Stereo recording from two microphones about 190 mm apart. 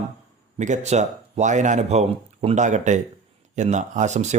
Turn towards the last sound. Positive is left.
turn(degrees=-40)  # may be behind; listen again after turning